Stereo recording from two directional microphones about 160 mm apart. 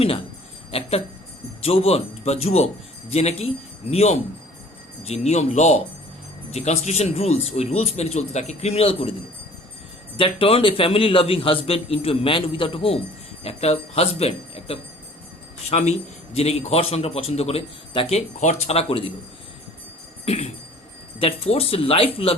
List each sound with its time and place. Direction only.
0.7 s a sound: 40° left (ahead or behind)
1.6 s speech: 40° left (ahead or behind)
10.2 s speech: 35° left (ahead or behind)
20.2 s speech: 40° left (ahead or behind)